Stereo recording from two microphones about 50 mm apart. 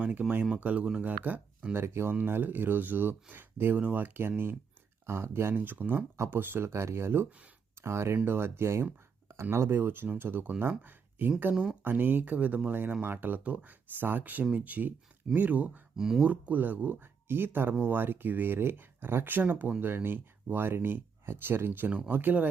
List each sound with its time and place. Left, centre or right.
0.1 s speech: right
1.7 s speech: right
2.2 s speech: right
5.0 s speech: right
13.1 s speech: right
13.4 s speech: right
14.0 s speech: right
16.0 s speech: centre
16.2 s speech: right